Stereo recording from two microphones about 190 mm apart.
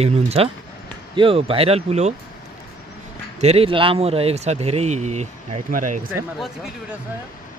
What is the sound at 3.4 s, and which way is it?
Speech, 35° right (ahead or behind).